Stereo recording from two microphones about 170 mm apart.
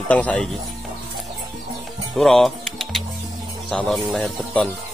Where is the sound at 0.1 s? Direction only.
10° left (ahead or behind).